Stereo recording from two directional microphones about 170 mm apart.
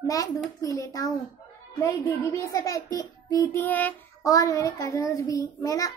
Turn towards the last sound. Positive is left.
turn(degrees=20)  # may be behind; listen again after turning